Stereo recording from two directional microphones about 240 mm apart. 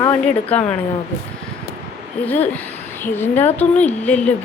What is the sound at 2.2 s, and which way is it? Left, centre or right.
A woman's voice, centre.